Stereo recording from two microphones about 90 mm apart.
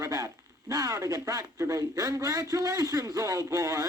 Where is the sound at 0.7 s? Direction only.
40° right (ahead or behind).